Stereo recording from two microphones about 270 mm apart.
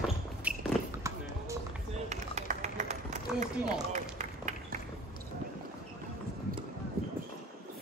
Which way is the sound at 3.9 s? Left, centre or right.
Right.